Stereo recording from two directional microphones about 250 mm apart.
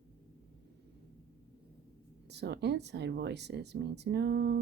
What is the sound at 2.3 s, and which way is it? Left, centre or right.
Speech, right.